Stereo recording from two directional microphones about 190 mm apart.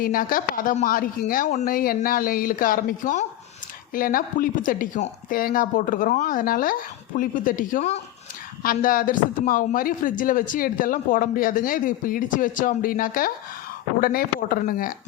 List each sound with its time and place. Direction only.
0.0 s a woman's voice: 50° left (ahead or behind)
8.6 s a woman's voice: 45° left (ahead or behind)